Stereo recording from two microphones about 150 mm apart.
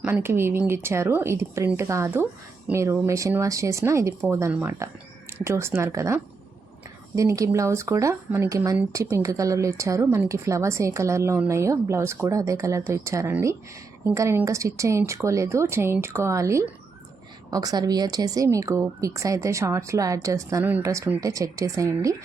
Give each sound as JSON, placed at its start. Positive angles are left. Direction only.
{"t": 0.0, "sound": "speech", "side_deg": -15}
{"t": 7.2, "sound": "speech", "side_deg": -20}